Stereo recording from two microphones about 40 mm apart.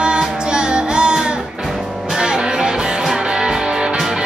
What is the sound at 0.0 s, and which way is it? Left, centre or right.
Music, right.